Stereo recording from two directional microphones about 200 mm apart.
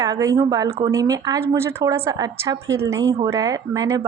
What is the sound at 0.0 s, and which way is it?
A woman's voice, 15° right (ahead or behind).